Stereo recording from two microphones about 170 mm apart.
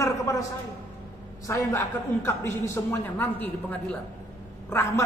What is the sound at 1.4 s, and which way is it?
A man's voice, 20° left (ahead or behind).